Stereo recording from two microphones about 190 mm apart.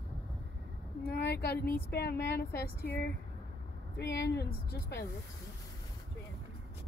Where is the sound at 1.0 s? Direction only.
55° left (ahead or behind).